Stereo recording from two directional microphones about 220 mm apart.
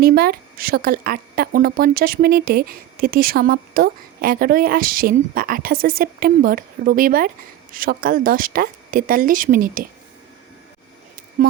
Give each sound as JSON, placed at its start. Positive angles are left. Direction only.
{"t": 0.0, "sound": "speech", "side_deg": -45}